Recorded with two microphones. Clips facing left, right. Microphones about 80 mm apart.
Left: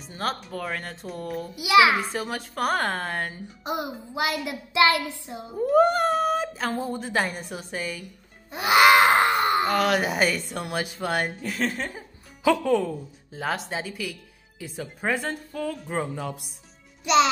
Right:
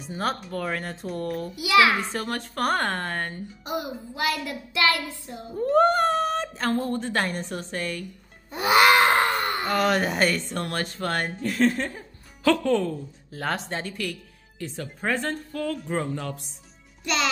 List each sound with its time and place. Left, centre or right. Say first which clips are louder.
0.0 s speech: right 2 dB; centre
1.5 s a sound: left 2 dB; centre
2.0 s speech: even; centre
3.6 s a sound: left 1 dB; left
5.6 s speech: even; centre
9.0 s wail: left 2 dB; centre
9.7 s speech: even; centre
17.0 s a child's voice: left 7 dB; left